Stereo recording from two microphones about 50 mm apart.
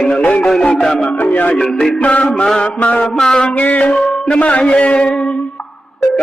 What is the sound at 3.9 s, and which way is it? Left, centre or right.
Music, centre.